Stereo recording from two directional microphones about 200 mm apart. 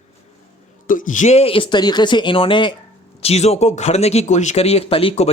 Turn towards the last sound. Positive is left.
turn(degrees=30)  # may be behind; listen again after turning